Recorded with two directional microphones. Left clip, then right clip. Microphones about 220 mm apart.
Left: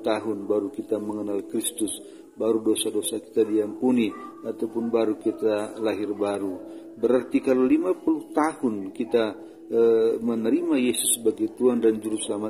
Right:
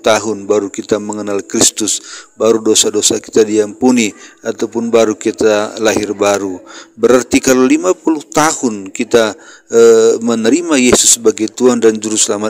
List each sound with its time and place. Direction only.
0.0 s a man's voice: 50° right (ahead or behind)